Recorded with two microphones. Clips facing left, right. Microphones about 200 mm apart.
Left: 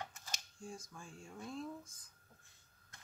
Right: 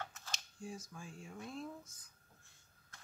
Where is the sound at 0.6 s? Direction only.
5° right (ahead or behind).